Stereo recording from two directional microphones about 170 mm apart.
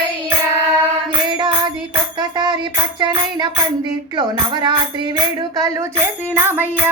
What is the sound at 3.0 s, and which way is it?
Speech, 25° right (ahead or behind).